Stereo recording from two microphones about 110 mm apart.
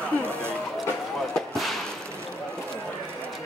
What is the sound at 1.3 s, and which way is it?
Fireworks, centre (ahead or behind).